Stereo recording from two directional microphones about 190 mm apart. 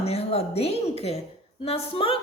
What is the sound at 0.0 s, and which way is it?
A woman's voice, 30° left (ahead or behind).